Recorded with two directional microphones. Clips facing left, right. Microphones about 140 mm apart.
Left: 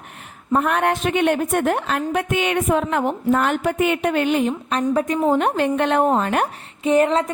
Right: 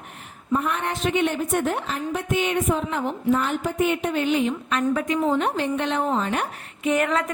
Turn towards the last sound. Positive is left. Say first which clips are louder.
# left 5 dB
turn(degrees=30)  # may be behind; listen again after turning